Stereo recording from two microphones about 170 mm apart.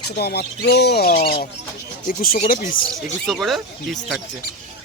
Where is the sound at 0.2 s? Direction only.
70° left (ahead or behind).